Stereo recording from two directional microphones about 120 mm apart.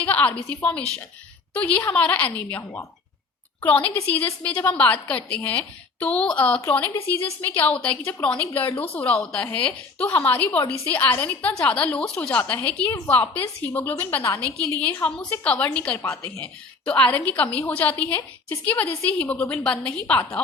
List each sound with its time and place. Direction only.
0.0 s a woman's voice: 15° left (ahead or behind)
3.6 s a woman's voice: 15° left (ahead or behind)